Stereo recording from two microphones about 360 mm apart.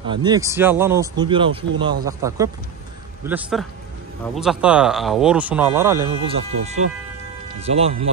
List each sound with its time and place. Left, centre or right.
0.0 s speech: centre